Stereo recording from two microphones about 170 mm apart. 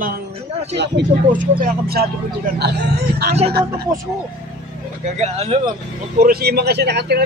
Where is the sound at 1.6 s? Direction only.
65° right (ahead or behind).